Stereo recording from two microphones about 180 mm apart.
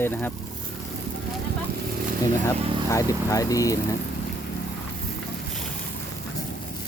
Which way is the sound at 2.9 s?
20° left (ahead or behind).